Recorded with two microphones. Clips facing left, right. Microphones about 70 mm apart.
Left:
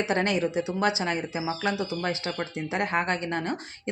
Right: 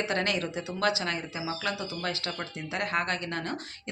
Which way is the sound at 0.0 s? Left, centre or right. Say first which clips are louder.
Left 4 dB; left.